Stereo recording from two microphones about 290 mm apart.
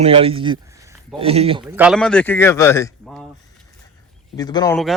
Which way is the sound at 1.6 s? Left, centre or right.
Centre.